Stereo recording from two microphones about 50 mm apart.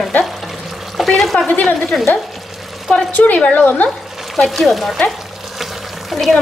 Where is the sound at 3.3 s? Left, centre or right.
Left.